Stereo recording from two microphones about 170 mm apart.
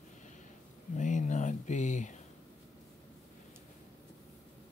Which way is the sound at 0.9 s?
45° left (ahead or behind).